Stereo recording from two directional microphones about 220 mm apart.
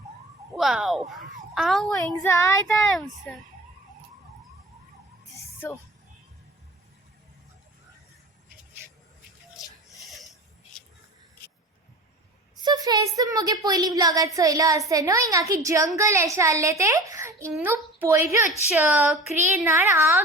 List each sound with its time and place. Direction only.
0.5 s speech: centre (ahead or behind)
2.2 s child singing: 15° left (ahead or behind)
2.7 s speech: centre (ahead or behind)
5.3 s a sound: 10° left (ahead or behind)
9.9 s a sound: centre (ahead or behind)
12.6 s a woman's voice: 15° right (ahead or behind)